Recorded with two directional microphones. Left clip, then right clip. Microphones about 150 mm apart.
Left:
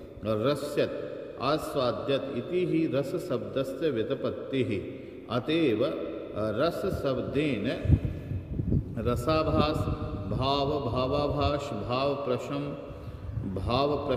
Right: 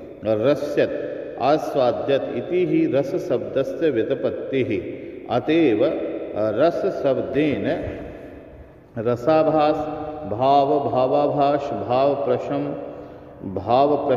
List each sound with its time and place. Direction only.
0.2 s a man's voice: 15° left (ahead or behind)
8.9 s a man's voice: 20° left (ahead or behind)